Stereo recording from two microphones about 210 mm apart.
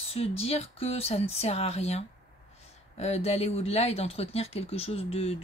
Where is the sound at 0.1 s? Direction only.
30° left (ahead or behind).